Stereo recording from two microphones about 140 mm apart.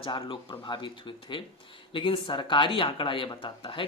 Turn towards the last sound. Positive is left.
turn(degrees=35)  # may be behind; listen again after turning